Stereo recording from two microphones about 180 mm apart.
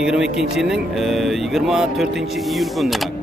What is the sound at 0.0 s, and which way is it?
Speech, 5° right (ahead or behind).